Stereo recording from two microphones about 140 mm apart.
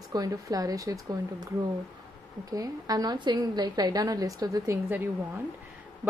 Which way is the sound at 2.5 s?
25° right (ahead or behind).